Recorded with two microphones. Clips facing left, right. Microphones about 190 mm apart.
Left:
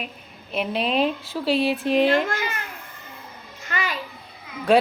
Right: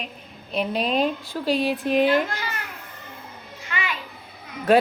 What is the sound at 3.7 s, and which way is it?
Children playing, 40° left (ahead or behind).